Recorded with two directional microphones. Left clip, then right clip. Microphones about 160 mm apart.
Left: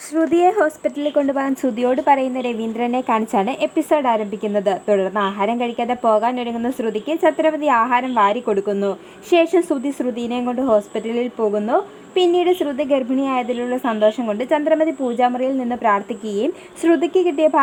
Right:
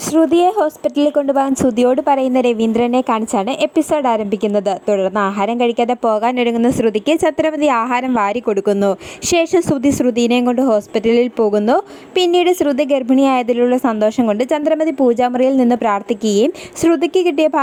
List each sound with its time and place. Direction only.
0.2 s a woman's voice: 5° left (ahead or behind)
0.9 s a woman's voice: 25° right (ahead or behind)
11.3 s speech: 45° right (ahead or behind)
12.2 s a woman's voice: 30° right (ahead or behind)